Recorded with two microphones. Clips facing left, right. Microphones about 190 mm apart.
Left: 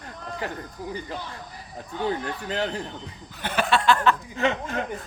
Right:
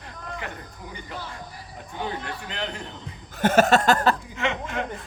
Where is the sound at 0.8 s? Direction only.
35° left (ahead or behind).